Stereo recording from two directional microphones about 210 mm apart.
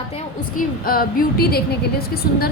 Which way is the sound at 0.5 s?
45° left (ahead or behind).